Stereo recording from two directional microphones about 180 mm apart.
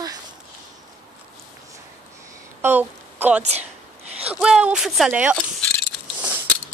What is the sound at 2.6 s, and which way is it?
Speech, 10° right (ahead or behind).